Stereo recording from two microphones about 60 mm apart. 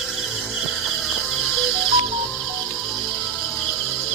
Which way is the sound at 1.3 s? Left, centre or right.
Centre.